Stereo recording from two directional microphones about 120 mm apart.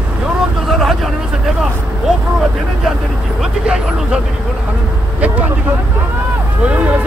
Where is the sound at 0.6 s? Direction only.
Centre (ahead or behind).